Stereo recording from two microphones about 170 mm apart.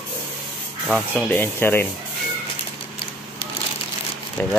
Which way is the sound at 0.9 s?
5° left (ahead or behind).